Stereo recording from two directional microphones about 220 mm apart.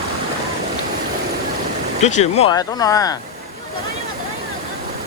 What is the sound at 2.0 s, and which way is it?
Speech, 30° left (ahead or behind).